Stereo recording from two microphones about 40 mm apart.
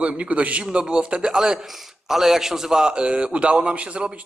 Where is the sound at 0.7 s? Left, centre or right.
Right.